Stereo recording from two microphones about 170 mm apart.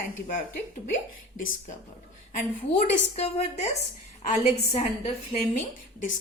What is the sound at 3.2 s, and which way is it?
A woman's voice, 40° left (ahead or behind).